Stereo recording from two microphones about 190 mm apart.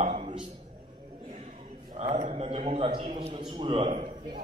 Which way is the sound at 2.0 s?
35° right (ahead or behind).